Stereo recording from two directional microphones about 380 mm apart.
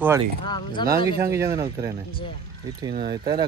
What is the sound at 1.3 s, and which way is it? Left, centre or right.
Speech, centre.